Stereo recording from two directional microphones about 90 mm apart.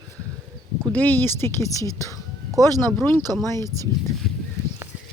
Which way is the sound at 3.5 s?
40° right (ahead or behind).